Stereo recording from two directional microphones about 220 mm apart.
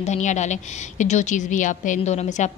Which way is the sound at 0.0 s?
30° left (ahead or behind).